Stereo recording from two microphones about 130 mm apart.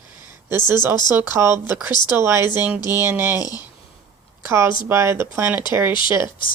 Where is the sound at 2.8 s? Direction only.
30° left (ahead or behind).